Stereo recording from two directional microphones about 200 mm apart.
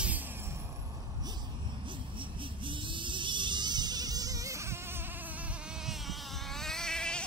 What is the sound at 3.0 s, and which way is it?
Insect, 25° right (ahead or behind).